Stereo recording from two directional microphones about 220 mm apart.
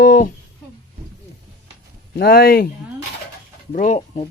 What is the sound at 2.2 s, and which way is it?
Speech, 45° left (ahead or behind).